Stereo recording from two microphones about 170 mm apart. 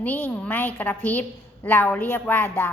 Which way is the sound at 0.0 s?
10° left (ahead or behind).